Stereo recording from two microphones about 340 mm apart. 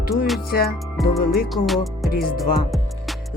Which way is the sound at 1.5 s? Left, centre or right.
Centre.